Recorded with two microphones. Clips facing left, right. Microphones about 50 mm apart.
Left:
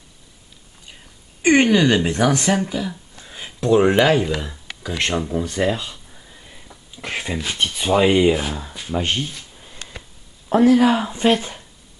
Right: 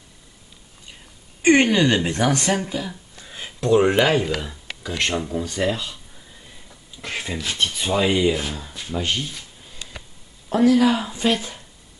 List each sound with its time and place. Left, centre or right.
1.7 s speech: centre
2.5 s a sound: centre
3.6 s speech: centre
3.9 s speech: centre
9.8 s a sound: left
10.5 s speech: left